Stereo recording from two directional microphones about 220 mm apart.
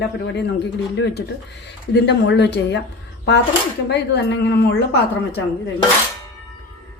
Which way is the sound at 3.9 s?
50° left (ahead or behind).